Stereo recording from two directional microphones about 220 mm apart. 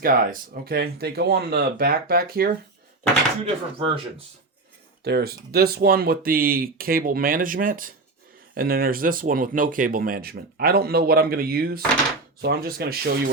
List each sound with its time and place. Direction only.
0.0 s speech: 40° right (ahead or behind)
3.4 s speech: 25° right (ahead or behind)
5.0 s speech: 45° right (ahead or behind)